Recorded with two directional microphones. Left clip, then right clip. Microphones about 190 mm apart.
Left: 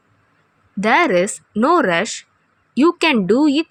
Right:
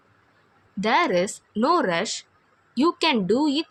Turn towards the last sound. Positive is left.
turn(degrees=30)  # may be behind; listen again after turning